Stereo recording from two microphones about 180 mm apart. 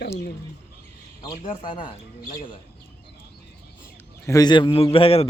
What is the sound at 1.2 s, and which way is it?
Speech, 30° left (ahead or behind).